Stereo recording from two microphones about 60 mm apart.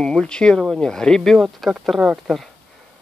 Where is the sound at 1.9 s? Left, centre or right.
Centre.